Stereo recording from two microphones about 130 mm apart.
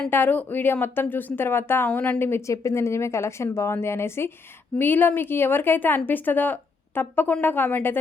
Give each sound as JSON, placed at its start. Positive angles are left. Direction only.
{"t": 0.1, "sound": "speech", "side_deg": 15}